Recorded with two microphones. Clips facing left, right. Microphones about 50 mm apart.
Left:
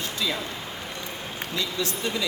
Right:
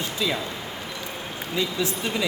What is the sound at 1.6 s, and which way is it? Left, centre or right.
Speech, centre.